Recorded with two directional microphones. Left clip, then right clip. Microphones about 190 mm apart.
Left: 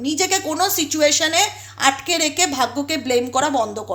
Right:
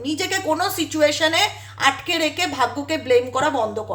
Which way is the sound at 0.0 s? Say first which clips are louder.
Left 3 dB; 35° left (ahead or behind).